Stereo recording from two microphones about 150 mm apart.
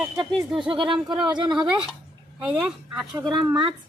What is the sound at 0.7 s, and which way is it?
Speech, 35° right (ahead or behind).